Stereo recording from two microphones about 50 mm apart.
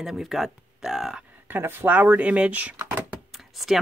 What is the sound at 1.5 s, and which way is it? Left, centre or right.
Speech, right.